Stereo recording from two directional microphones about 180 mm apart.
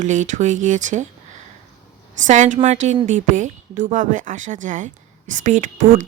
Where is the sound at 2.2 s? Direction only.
45° right (ahead or behind).